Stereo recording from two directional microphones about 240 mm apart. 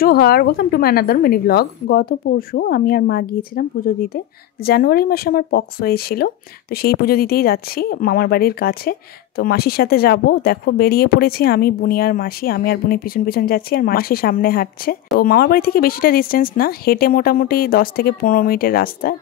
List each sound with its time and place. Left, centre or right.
0.0 s speech: left